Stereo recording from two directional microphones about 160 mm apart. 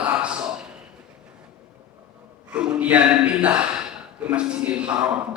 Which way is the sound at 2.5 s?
5° right (ahead or behind).